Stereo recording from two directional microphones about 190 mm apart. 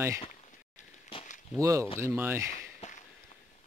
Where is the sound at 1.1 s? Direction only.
25° left (ahead or behind).